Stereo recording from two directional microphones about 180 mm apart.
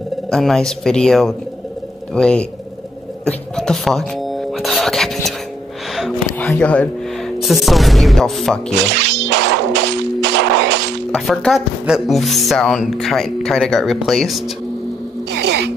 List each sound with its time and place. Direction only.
0.3 s speech: centre (ahead or behind)
3.3 s music: 5° left (ahead or behind)
5.9 s speech: centre (ahead or behind)
8.9 s a sound: 70° right (ahead or behind)
11.1 s speech: centre (ahead or behind)